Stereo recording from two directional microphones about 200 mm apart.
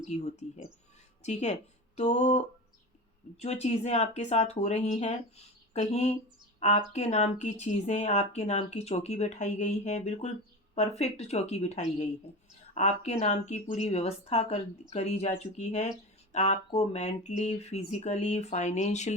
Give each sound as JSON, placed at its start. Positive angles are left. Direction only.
{"t": 0.0, "sound": "speech", "side_deg": 35}